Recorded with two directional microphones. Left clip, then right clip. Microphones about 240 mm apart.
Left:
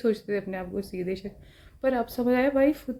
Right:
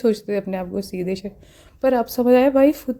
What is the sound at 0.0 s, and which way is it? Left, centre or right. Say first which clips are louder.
Speech: right 6 dB; right.